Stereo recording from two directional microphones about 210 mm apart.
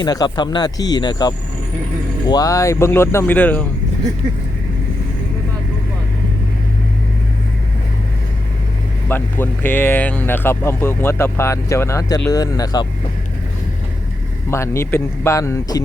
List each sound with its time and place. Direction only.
0.0 s speech: 20° left (ahead or behind)
9.0 s speech: 10° left (ahead or behind)
14.5 s speech: 15° left (ahead or behind)